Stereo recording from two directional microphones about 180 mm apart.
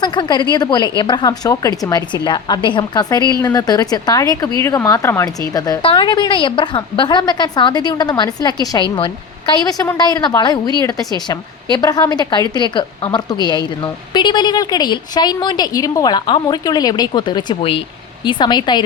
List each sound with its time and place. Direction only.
0.0 s a woman's voice: 25° left (ahead or behind)